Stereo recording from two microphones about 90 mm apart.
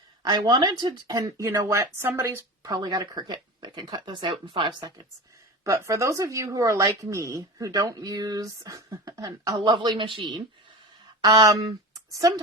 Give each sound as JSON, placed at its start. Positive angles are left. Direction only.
{"t": 0.2, "sound": "a woman's voice", "side_deg": -50}
{"t": 2.6, "sound": "speech", "side_deg": -50}
{"t": 5.6, "sound": "a woman's voice", "side_deg": -35}
{"t": 11.2, "sound": "speech", "side_deg": -50}